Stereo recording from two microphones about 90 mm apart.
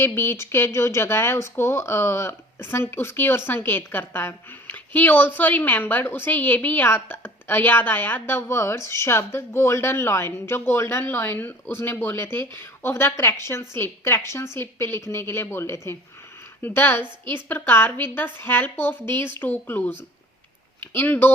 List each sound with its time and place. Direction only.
0.0 s a woman's voice: 25° left (ahead or behind)